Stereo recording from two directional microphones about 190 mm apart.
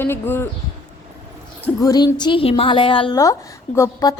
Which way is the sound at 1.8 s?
20° left (ahead or behind).